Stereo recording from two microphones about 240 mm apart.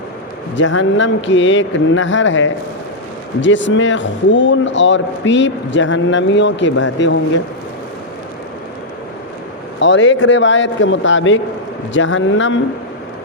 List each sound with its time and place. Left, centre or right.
0.5 s speech: left
9.8 s speech: left